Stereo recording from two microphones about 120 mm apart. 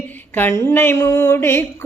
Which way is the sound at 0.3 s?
20° left (ahead or behind).